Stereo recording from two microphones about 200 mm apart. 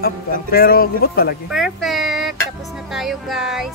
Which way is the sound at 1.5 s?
Centre (ahead or behind).